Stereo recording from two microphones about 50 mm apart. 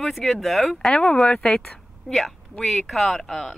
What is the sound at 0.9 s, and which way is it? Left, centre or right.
Speech, centre.